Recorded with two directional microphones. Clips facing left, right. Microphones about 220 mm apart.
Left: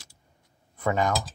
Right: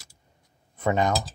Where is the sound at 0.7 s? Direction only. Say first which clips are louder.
Right 2 dB; 20° right (ahead or behind).